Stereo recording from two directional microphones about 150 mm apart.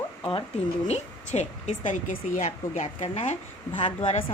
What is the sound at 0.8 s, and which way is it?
A woman's voice, 45° left (ahead or behind).